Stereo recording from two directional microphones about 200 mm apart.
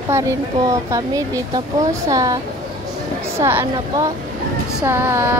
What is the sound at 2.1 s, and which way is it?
Speech, 15° right (ahead or behind).